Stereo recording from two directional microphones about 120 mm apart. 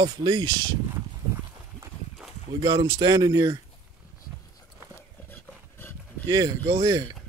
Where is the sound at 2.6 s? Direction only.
35° right (ahead or behind).